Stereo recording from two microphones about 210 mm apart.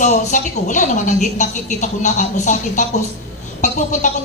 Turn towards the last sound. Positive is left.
turn(degrees=35)  # may be behind; listen again after turning